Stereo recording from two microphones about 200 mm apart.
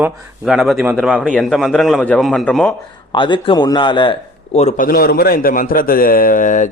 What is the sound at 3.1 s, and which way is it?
A man's voice, 25° left (ahead or behind).